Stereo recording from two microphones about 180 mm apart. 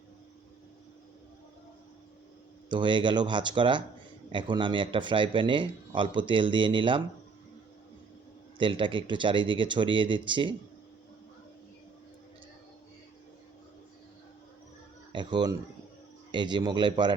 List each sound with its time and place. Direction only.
2.6 s speech: 25° right (ahead or behind)
8.5 s speech: 25° right (ahead or behind)
15.1 s speech: 25° right (ahead or behind)